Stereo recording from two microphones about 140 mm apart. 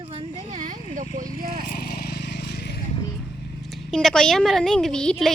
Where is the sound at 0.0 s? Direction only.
40° right (ahead or behind); by 1.0 s 65° right (ahead or behind).